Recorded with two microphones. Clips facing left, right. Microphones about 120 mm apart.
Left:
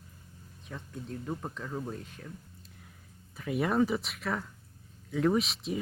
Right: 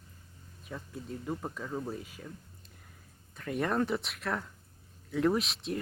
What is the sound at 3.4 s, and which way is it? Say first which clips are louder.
Speech: left 3 dB; 5° left (ahead or behind).